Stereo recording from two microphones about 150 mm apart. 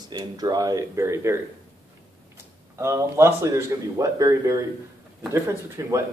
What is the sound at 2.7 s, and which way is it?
Speech, 20° right (ahead or behind).